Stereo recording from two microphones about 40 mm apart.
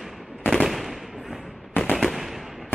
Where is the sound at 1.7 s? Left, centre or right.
Left.